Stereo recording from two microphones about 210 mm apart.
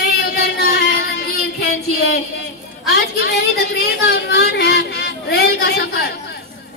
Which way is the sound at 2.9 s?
50° left (ahead or behind).